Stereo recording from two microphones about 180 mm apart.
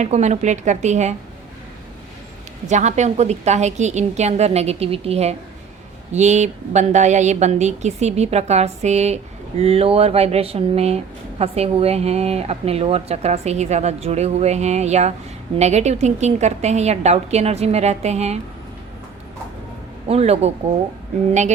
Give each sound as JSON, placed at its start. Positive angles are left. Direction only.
{"t": 0.0, "sound": "a woman's voice", "side_deg": -40}
{"t": 2.6, "sound": "a woman's voice", "side_deg": -40}
{"t": 20.1, "sound": "a woman's voice", "side_deg": -35}